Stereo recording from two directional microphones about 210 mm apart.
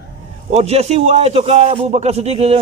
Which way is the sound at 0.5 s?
30° right (ahead or behind).